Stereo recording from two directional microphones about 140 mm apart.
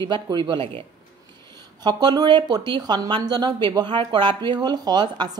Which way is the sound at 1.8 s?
30° right (ahead or behind).